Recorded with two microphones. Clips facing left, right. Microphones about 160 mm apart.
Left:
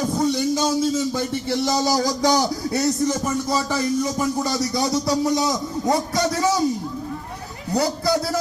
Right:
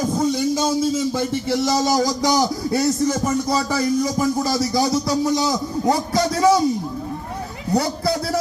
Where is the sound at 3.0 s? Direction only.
15° right (ahead or behind).